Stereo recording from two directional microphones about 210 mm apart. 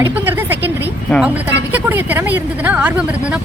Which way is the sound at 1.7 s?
10° right (ahead or behind).